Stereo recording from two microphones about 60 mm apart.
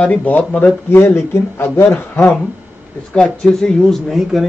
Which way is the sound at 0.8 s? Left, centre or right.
Left.